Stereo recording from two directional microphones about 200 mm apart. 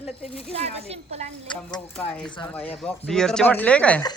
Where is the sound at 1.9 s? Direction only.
5° left (ahead or behind).